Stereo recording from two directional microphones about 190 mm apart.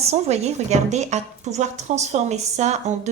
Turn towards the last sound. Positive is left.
turn(degrees=-35)  # may be behind; listen again after turning